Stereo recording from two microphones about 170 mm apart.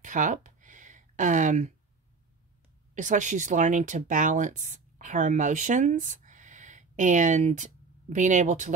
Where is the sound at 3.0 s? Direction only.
45° right (ahead or behind).